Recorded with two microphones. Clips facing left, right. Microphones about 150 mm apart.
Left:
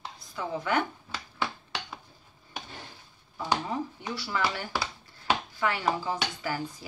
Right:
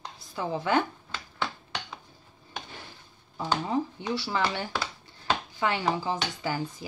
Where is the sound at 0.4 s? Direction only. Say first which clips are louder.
Right 2 dB; 25° right (ahead or behind).